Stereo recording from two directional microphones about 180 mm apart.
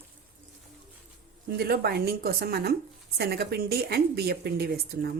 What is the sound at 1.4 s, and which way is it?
Speech, 60° right (ahead or behind).